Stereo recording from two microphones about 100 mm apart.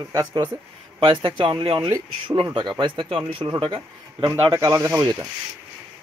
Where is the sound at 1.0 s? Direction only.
55° right (ahead or behind).